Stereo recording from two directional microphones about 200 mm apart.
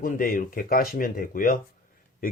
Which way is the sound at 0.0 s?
45° left (ahead or behind).